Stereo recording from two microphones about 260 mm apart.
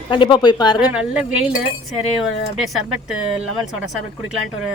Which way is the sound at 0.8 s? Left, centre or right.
Centre.